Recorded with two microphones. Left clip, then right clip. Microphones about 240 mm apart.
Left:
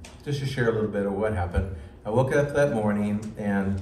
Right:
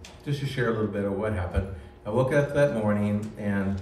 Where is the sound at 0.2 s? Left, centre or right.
Centre.